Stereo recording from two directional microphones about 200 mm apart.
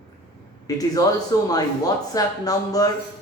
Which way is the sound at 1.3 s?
15° left (ahead or behind).